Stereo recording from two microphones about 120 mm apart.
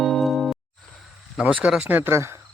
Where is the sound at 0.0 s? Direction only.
Centre (ahead or behind).